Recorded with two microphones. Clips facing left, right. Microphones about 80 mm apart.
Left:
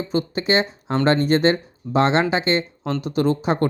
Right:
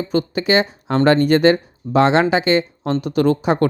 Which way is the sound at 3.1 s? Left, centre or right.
Right.